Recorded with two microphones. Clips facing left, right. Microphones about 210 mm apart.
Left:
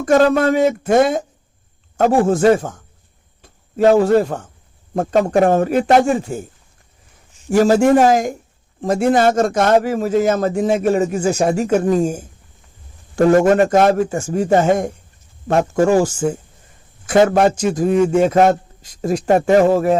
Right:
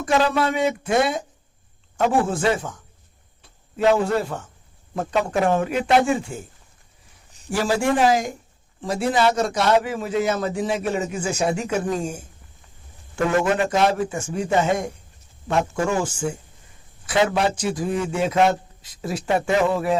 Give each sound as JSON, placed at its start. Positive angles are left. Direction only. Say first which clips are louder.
{"t": 0.0, "sound": "a man's voice", "louder": "left 7 dB", "side_deg": 45}
{"t": 7.4, "sound": "a man's voice", "louder": "left 9 dB", "side_deg": 45}